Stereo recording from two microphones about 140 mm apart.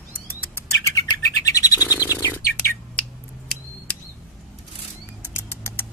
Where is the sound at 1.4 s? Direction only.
25° left (ahead or behind).